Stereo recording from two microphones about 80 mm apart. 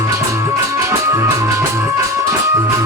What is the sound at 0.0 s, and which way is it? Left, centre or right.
Music, right.